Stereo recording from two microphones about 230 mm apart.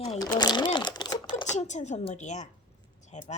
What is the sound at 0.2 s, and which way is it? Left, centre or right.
Sewing machine, centre.